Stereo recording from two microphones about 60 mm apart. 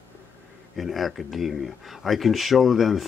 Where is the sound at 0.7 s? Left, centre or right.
Centre.